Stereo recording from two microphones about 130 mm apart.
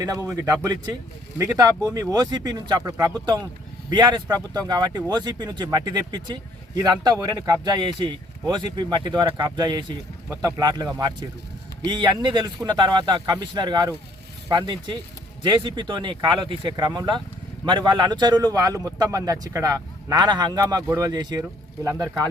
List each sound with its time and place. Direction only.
0.0 s speech: 25° right (ahead or behind)